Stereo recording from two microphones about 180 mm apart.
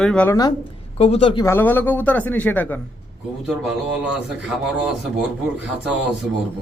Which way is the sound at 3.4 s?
5° right (ahead or behind).